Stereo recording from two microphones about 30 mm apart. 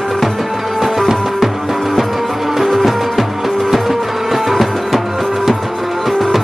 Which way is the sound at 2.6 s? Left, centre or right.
Centre.